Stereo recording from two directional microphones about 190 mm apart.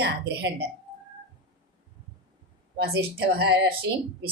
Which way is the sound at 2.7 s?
55° right (ahead or behind).